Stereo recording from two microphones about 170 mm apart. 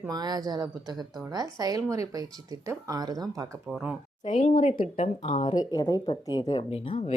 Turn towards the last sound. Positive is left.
turn(degrees=35)  # may be behind; listen again after turning